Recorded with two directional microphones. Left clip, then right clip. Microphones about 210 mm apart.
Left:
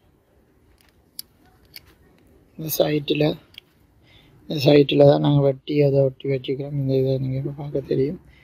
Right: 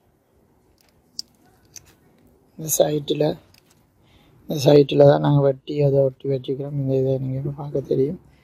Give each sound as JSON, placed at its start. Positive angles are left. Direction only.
{"t": 2.5, "sound": "speech", "side_deg": 0}